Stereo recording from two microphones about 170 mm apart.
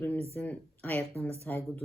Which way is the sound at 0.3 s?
10° left (ahead or behind).